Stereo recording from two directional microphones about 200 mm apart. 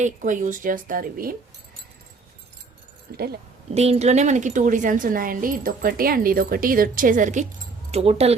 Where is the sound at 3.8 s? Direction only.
30° right (ahead or behind).